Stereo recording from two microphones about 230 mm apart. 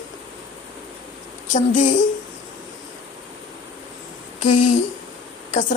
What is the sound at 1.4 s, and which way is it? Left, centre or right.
Speech, left.